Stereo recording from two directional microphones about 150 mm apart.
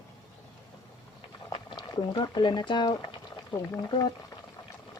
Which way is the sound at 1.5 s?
35° left (ahead or behind).